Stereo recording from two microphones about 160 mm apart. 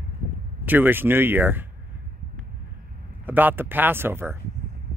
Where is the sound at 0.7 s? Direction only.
10° right (ahead or behind).